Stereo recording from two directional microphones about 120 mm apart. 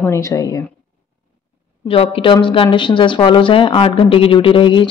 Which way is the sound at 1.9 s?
50° left (ahead or behind).